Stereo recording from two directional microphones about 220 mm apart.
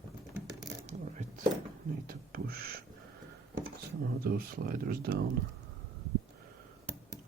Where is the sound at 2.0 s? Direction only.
40° right (ahead or behind).